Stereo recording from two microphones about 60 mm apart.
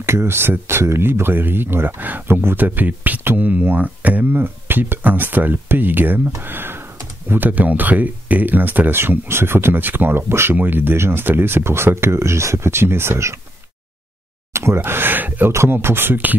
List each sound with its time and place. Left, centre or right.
0.0 s speech: right
14.5 s a sound: right
14.8 s speech: right